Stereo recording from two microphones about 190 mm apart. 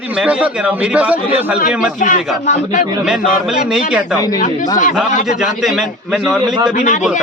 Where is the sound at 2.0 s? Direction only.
45° left (ahead or behind).